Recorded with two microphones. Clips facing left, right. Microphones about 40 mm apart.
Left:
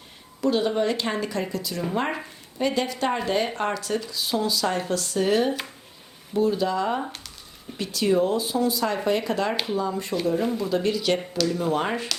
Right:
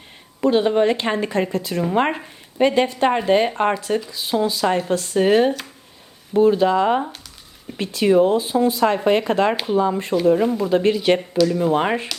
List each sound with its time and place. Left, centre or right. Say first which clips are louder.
0.4 s speech: right 6 dB; right
10.2 s speech: right 8 dB; right
11.4 s speech: right 4 dB; right